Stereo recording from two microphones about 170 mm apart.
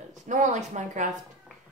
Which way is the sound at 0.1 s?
45° right (ahead or behind).